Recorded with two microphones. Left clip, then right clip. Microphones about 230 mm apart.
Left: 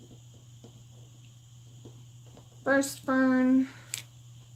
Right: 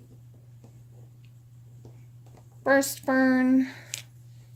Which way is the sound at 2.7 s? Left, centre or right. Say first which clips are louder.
Right 4 dB; right.